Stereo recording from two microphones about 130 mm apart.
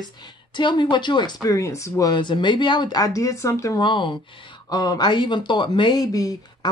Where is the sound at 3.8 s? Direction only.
35° left (ahead or behind).